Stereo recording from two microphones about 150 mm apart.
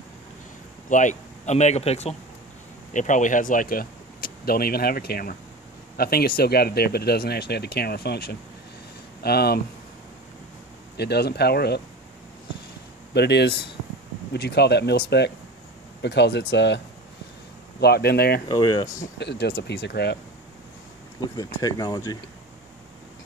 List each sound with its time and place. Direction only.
0.8 s speech: 55° left (ahead or behind)
2.9 s speech: 55° left (ahead or behind); by 9.6 s 90° left
11.0 s speech: 90° left
13.1 s speech: 90° left
17.7 s speech: 90° left
18.5 s speech: 25° left (ahead or behind)
18.9 s speech: 90° left
21.2 s speech: 25° left (ahead or behind)